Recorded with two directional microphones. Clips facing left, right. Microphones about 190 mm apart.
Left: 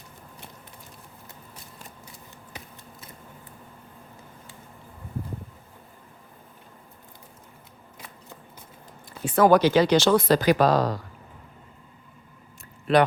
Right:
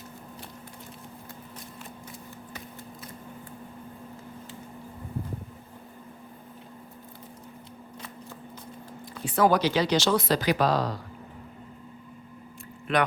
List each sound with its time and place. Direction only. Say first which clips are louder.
9.2 s speech: left 5 dB; 50° left (ahead or behind)
12.9 s speech: left 6 dB; 35° left (ahead or behind)